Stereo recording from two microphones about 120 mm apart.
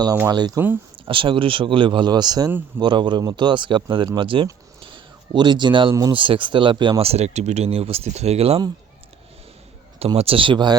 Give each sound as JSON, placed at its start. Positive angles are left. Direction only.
{"t": 0.3, "sound": "a man's voice", "side_deg": -35}
{"t": 1.0, "sound": "a man's voice", "side_deg": -45}
{"t": 5.9, "sound": "a man's voice", "side_deg": -30}
{"t": 6.1, "sound": "speech", "side_deg": -45}
{"t": 7.0, "sound": "speech", "side_deg": -60}
{"t": 10.2, "sound": "speech", "side_deg": -50}